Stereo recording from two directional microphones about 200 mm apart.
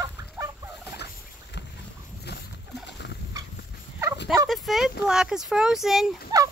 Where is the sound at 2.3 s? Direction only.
55° left (ahead or behind).